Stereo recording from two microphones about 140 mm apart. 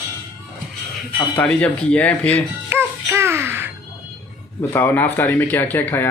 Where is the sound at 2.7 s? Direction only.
15° right (ahead or behind).